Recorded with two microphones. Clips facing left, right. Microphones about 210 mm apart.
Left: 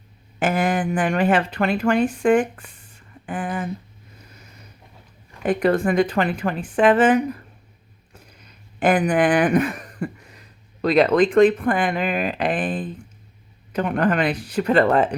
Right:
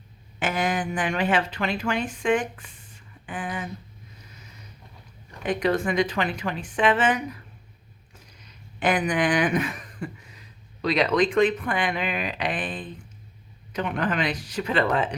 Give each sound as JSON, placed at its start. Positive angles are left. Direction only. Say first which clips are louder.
{"t": 0.3, "sound": "speech", "louder": "left 5 dB", "side_deg": 55}
{"t": 5.5, "sound": "speech", "louder": "left 5 dB", "side_deg": 55}